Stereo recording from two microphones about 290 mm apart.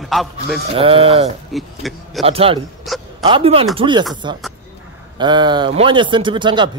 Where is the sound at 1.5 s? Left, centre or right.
Centre.